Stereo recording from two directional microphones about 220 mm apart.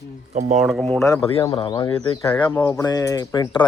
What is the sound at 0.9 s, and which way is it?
Speech, 15° left (ahead or behind).